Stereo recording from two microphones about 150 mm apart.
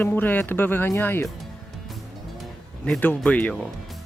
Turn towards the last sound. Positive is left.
turn(degrees=10)  # may be behind; listen again after turning